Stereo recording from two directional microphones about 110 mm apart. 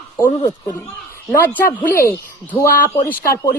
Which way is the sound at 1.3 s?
15° left (ahead or behind).